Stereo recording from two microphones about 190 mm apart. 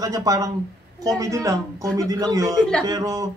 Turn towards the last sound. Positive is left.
turn(degrees=-20)  # may be behind; listen again after turning